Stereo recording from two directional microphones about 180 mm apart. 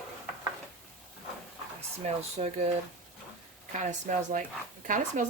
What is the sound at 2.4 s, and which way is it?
Speech, 35° right (ahead or behind).